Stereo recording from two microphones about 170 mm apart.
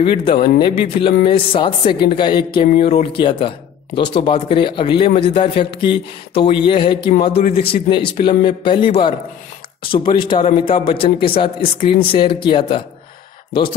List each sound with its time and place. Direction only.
0.0 s a man's voice: 30° left (ahead or behind)